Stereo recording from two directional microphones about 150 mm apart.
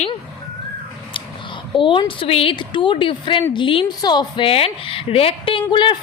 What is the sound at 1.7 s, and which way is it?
A woman's voice, 35° left (ahead or behind).